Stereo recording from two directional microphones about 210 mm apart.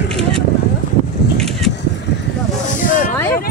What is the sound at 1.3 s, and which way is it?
Vehicle, centre (ahead or behind).